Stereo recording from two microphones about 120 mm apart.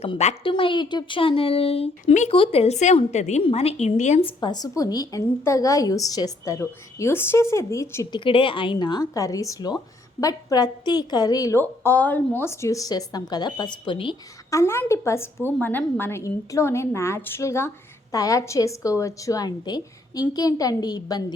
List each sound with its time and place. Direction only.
0.4 s speech: 45° left (ahead or behind); by 3.4 s 70° left (ahead or behind)
3.4 s speech: 55° left (ahead or behind); by 4.2 s 75° left (ahead or behind)
4.2 s a woman's voice: 45° left (ahead or behind); by 8.0 s 25° left (ahead or behind)
8.1 s a woman's voice: 45° left (ahead or behind); by 11.6 s 30° left (ahead or behind)
11.6 s a woman's voice: 15° left (ahead or behind); by 14.2 s 40° left (ahead or behind)
14.5 s a woman's voice: 20° left (ahead or behind)